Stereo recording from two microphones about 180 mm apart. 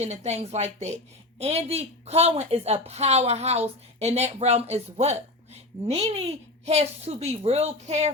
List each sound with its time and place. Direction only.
0.0 s a woman's voice: 40° right (ahead or behind)